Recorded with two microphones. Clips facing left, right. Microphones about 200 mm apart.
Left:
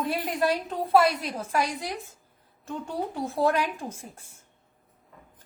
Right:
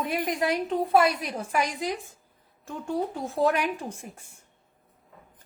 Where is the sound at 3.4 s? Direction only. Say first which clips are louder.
Even; 15° right (ahead or behind).